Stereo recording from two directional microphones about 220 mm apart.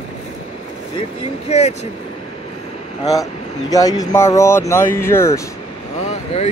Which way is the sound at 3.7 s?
15° left (ahead or behind).